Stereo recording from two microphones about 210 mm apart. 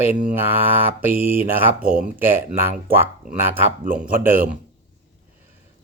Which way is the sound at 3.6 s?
40° right (ahead or behind).